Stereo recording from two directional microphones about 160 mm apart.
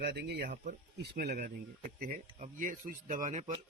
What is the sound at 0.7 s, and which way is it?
Speech, 75° right (ahead or behind).